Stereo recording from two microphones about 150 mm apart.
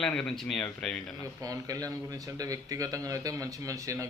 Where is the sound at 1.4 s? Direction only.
25° right (ahead or behind).